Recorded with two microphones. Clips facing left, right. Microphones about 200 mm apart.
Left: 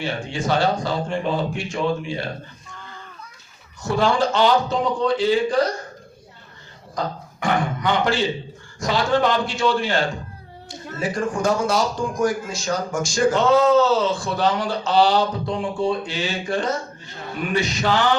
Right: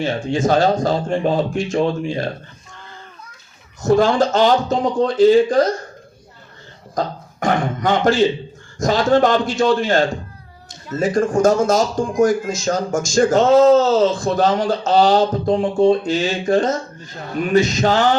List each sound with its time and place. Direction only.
0.0 s speech: 45° right (ahead or behind)
3.8 s speech: 45° right (ahead or behind)
6.9 s speech: 45° right (ahead or behind)